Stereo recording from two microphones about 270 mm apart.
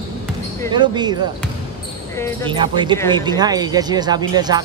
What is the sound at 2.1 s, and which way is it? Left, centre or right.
Speech, centre.